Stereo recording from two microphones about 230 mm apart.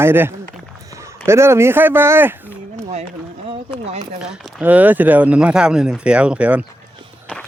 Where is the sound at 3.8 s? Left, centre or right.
Right.